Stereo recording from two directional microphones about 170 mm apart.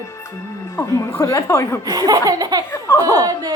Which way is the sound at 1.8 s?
20° right (ahead or behind).